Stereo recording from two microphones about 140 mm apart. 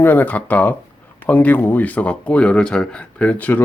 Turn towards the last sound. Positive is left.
turn(degrees=10)  # may be behind; listen again after turning